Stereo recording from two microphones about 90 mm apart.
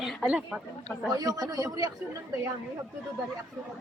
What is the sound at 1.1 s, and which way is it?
Speech, 45° right (ahead or behind).